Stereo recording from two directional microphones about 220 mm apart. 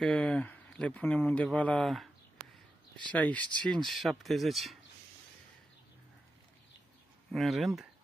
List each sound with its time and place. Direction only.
0.0 s speech: 5° left (ahead or behind)
3.1 s speech: 5° left (ahead or behind)
7.2 s speech: centre (ahead or behind)